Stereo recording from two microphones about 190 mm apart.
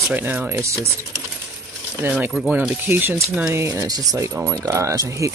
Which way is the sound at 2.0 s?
5° right (ahead or behind).